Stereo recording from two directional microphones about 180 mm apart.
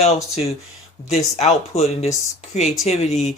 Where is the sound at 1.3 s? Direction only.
35° left (ahead or behind).